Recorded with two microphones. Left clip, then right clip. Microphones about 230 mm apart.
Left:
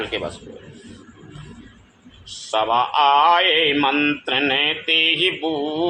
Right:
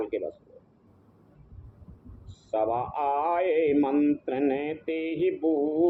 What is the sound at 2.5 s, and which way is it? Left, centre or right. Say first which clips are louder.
Speech: left 8 dB; left.